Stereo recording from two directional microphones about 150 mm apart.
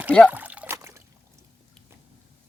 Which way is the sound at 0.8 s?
20° right (ahead or behind).